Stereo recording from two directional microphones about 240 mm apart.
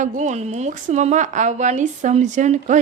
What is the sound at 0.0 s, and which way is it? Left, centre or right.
A woman's voice, right.